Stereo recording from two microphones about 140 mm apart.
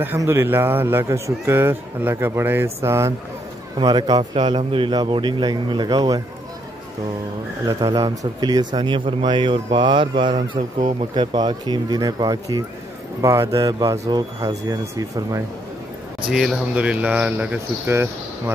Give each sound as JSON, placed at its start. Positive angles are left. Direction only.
{"t": 0.0, "sound": "a man's voice", "side_deg": -15}
{"t": 3.7, "sound": "speech", "side_deg": -30}
{"t": 7.6, "sound": "a man's voice", "side_deg": -25}
{"t": 16.3, "sound": "a man's voice", "side_deg": -5}